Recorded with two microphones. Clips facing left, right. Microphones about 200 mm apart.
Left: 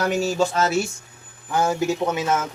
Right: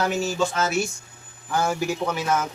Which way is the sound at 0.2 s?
35° left (ahead or behind).